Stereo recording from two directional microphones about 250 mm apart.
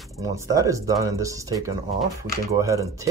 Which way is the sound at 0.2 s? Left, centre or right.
Centre.